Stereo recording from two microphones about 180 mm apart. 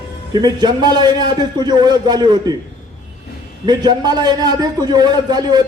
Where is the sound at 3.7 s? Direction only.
25° right (ahead or behind).